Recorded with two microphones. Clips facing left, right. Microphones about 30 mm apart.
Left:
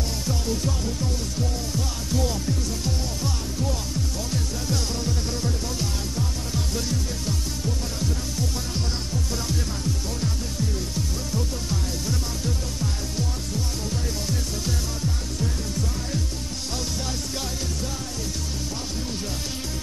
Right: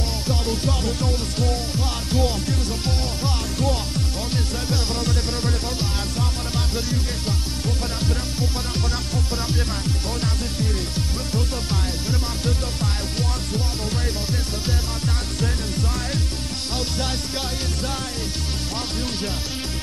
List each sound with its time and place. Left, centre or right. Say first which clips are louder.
0.3 s music: right 3 dB; right
2.0 s music: right 4 dB; right
6.7 s music: right 2 dB; right
12.1 s music: right 4 dB; right